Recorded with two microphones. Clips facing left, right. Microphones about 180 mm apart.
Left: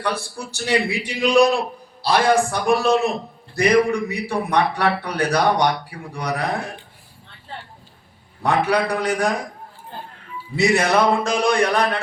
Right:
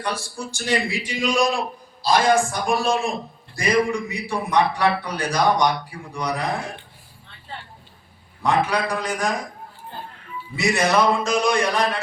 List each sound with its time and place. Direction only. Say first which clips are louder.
0.0 s a man's voice: left 2 dB; 60° left (ahead or behind)
8.4 s a man's voice: left 2 dB; 60° left (ahead or behind)
10.5 s a man's voice: left 2 dB; 60° left (ahead or behind)